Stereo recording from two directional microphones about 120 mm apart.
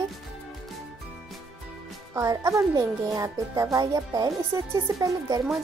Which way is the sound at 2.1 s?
25° right (ahead or behind).